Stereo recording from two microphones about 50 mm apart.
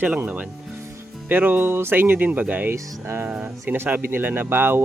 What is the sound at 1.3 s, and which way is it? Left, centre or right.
Speech, right.